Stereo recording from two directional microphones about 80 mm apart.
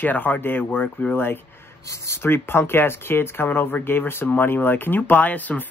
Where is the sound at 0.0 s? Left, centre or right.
Left.